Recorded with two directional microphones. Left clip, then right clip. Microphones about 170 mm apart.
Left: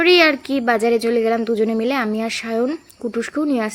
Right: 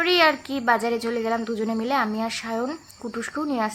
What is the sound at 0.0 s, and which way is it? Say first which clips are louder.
A woman's voice: left 6 dB; 25° left (ahead or behind).